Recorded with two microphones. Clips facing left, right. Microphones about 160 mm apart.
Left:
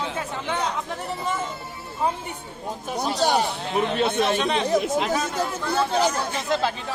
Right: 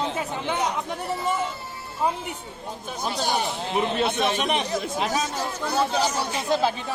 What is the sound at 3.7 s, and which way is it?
Speech, 20° right (ahead or behind).